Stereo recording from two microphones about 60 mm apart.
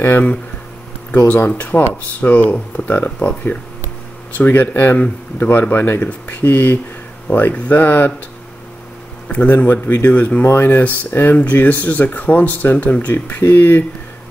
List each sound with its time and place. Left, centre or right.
1.1 s speech: left
9.3 s speech: left
10.4 s speech: left
10.7 s speech: left
13.4 s speech: left